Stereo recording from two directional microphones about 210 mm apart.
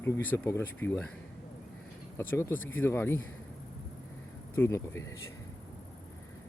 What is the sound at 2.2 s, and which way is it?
Speech, 10° left (ahead or behind).